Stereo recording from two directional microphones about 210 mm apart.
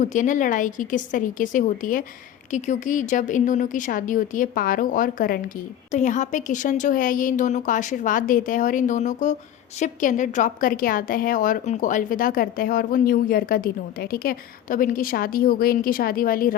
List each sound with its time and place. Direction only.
0.0 s a woman's voice: 35° left (ahead or behind)